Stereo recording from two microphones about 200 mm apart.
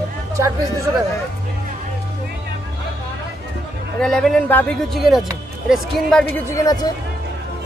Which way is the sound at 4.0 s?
5° left (ahead or behind).